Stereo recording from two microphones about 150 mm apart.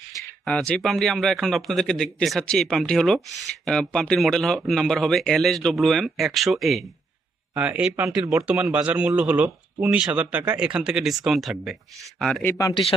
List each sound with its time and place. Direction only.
0.4 s speech: 5° left (ahead or behind)
12.4 s speech: 20° left (ahead or behind)